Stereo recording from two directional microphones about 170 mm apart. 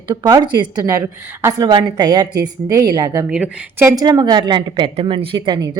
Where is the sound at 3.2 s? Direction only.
10° right (ahead or behind).